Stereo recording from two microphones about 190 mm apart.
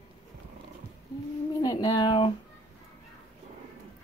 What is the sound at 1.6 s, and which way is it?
Speech, 20° left (ahead or behind).